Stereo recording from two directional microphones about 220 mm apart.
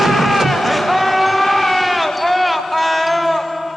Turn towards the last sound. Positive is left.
turn(degrees=0)  # may be behind; listen again after turning